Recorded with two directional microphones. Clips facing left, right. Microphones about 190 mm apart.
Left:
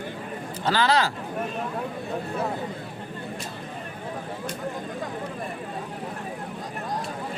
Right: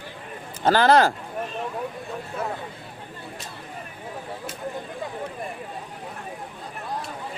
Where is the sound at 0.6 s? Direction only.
50° right (ahead or behind).